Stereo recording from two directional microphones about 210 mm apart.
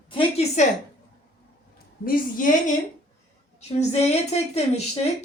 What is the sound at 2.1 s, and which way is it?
A woman's voice, 40° left (ahead or behind).